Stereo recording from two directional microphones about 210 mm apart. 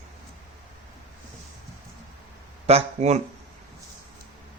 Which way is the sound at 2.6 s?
30° right (ahead or behind).